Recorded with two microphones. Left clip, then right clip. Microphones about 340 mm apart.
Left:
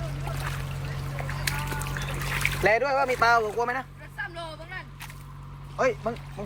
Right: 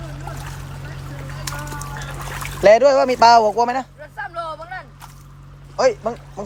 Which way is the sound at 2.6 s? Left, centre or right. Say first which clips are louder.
Right 12 dB; right.